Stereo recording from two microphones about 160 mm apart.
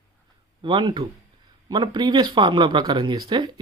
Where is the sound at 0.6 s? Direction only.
30° right (ahead or behind).